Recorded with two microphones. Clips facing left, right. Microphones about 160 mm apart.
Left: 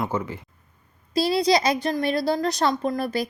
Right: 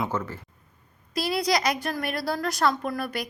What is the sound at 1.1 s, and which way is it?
A woman's voice, 25° left (ahead or behind).